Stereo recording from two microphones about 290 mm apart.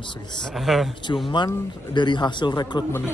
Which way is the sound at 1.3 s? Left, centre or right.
Centre.